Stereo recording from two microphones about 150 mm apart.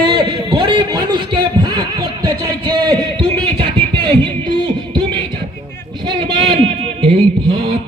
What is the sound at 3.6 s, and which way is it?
Beatboxing, 35° right (ahead or behind).